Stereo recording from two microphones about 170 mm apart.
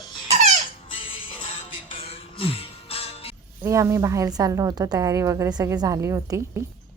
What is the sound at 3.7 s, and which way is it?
A woman's voice, 15° right (ahead or behind).